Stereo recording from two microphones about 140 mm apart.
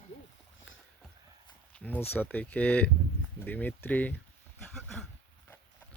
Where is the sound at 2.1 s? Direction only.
10° left (ahead or behind).